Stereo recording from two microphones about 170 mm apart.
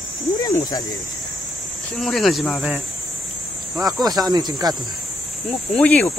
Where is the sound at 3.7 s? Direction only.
20° right (ahead or behind).